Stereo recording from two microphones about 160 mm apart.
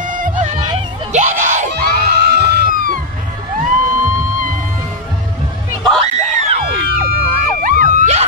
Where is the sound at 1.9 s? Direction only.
85° right; by 3.0 s 60° right (ahead or behind).